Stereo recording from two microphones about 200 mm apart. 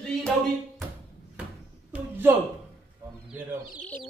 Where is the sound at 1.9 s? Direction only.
10° right (ahead or behind).